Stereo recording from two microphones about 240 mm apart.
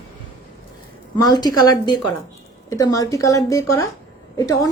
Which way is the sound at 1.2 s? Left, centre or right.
Centre.